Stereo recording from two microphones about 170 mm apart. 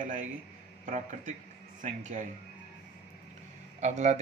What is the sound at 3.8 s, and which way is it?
Speech, 45° right (ahead or behind).